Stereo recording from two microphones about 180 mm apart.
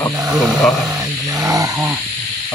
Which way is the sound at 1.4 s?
20° right (ahead or behind).